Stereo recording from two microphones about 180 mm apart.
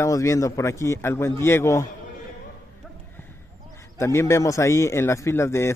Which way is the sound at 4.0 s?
15° left (ahead or behind).